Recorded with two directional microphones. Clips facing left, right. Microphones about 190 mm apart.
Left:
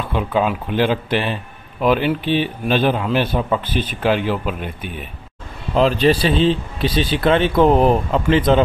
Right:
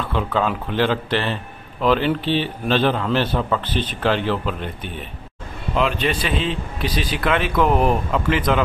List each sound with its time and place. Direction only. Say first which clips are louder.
0.0 s a man's voice: left 2 dB; 15° left (ahead or behind)
5.8 s a man's voice: left 6 dB; 35° left (ahead or behind)